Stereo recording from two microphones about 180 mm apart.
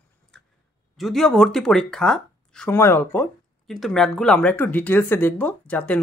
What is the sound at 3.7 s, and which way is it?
Speech, centre (ahead or behind).